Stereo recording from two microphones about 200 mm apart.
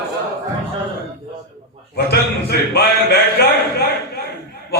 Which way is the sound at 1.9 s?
55° left (ahead or behind).